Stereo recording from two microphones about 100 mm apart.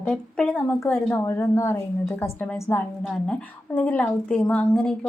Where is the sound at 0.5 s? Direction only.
20° left (ahead or behind).